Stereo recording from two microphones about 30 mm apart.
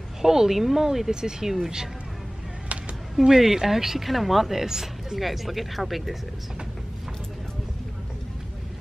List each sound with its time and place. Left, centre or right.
0.2 s speech: centre
3.2 s speech: centre
4.6 s speech: centre
5.2 s speech: centre